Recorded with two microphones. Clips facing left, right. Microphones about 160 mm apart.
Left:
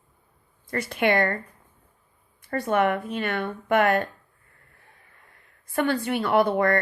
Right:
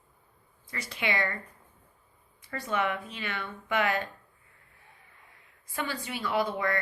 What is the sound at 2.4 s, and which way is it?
Speech, 55° left (ahead or behind).